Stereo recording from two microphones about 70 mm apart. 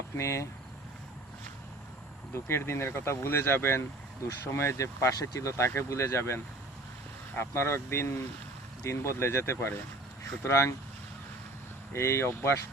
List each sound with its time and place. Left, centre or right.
0.2 s speech: left
2.3 s speech: left
11.9 s speech: left